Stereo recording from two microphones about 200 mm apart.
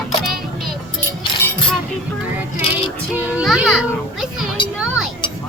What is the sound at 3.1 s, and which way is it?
A child's voice, 5° right (ahead or behind).